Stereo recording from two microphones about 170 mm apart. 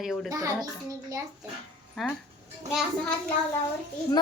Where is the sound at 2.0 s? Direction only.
Centre (ahead or behind).